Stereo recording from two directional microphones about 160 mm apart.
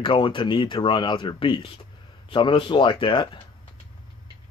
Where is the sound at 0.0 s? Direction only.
30° left (ahead or behind).